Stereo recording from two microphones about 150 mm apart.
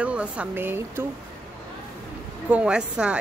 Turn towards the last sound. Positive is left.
turn(degrees=-5)  # may be behind; listen again after turning